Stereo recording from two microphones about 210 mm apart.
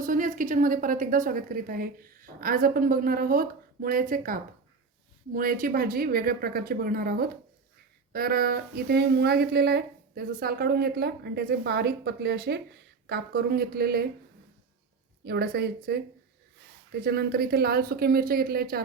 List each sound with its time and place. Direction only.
0.0 s a woman's voice: 40° right (ahead or behind)
15.2 s a woman's voice: 50° right (ahead or behind)